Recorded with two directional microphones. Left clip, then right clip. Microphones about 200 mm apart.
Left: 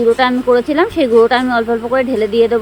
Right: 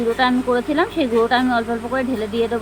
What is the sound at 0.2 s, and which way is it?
Speech, 45° left (ahead or behind).